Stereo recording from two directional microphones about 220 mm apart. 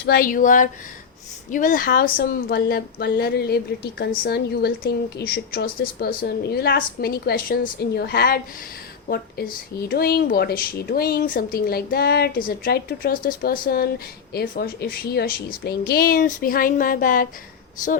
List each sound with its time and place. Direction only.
0.0 s a woman's voice: 45° left (ahead or behind)